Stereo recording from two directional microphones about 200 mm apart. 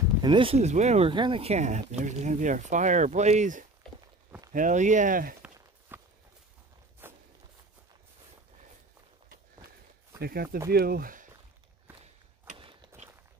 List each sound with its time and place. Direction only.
0.2 s speech: 25° right (ahead or behind); by 5.3 s 40° right (ahead or behind)
5.9 s walk: 10° right (ahead or behind)
10.2 s speech: 50° right (ahead or behind)
12.5 s walk: 25° right (ahead or behind)